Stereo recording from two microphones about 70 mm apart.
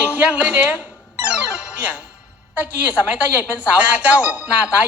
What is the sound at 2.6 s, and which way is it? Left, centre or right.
Speech, right.